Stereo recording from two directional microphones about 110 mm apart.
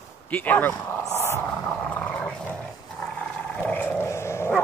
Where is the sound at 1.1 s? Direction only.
20° left (ahead or behind).